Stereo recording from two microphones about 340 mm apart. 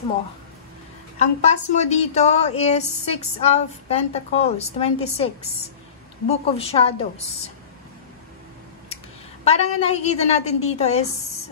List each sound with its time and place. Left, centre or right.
1.1 s a woman's voice: left
9.4 s a woman's voice: centre